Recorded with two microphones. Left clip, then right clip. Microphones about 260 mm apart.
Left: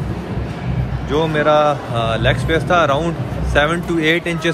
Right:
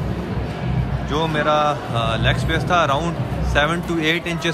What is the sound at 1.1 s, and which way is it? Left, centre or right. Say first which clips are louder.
Speech: left 4 dB; centre.